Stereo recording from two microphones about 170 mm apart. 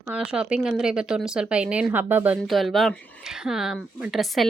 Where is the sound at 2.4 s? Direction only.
Centre (ahead or behind).